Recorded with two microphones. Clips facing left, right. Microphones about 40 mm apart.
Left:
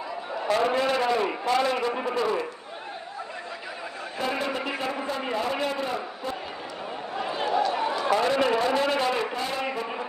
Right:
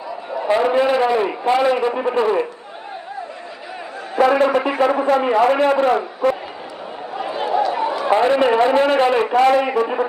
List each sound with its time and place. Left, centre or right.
0.4 s a man's voice: centre
2.0 s a man's voice: right
4.2 s a man's voice: right
7.2 s a sound: centre
8.1 s a man's voice: right
9.3 s a man's voice: right